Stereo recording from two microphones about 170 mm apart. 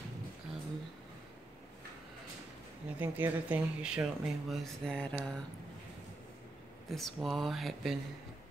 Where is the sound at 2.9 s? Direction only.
10° right (ahead or behind).